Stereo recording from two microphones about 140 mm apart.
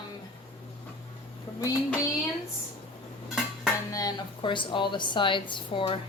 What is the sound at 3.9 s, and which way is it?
A woman's voice, 25° left (ahead or behind).